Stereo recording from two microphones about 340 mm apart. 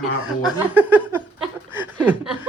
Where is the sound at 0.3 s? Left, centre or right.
Centre.